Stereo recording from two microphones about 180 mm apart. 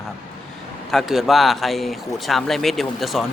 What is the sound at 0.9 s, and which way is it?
Speech, centre (ahead or behind).